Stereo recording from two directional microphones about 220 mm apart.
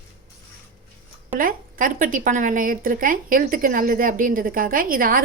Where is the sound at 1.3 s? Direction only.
40° right (ahead or behind).